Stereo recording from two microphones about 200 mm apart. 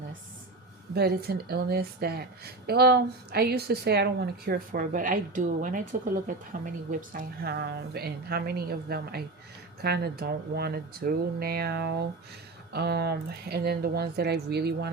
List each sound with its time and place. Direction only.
0.9 s speech: 50° right (ahead or behind)
4.9 s speech: 40° right (ahead or behind)